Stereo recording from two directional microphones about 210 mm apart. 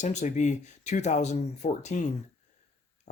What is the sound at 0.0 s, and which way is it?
Speech, 35° left (ahead or behind).